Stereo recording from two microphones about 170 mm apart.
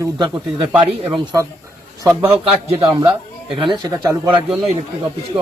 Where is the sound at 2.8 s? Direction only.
25° right (ahead or behind).